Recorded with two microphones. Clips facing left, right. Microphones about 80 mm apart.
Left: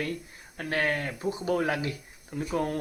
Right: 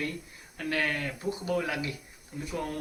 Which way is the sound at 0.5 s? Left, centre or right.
Left.